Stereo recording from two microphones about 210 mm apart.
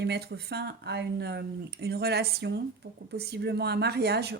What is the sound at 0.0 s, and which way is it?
Speech, 50° right (ahead or behind).